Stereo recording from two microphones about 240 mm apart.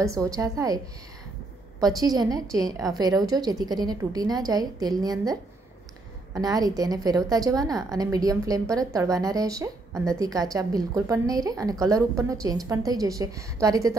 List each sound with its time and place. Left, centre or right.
0.0 s a woman's voice: centre
1.8 s a woman's voice: centre